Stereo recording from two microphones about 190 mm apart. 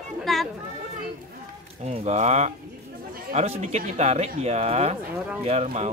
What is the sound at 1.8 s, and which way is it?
Speech, 35° right (ahead or behind).